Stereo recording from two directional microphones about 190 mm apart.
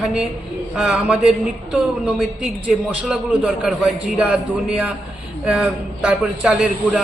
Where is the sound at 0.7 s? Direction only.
5° right (ahead or behind).